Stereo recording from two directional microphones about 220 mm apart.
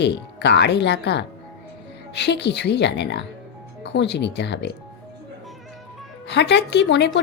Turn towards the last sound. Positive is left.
turn(degrees=50)  # may be behind; listen again after turning